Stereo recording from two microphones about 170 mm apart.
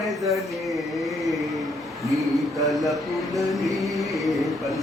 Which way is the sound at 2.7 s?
Centre (ahead or behind).